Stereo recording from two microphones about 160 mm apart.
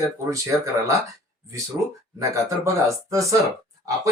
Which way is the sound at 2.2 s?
20° right (ahead or behind).